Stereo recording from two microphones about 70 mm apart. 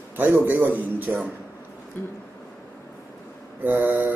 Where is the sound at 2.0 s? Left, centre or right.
Left.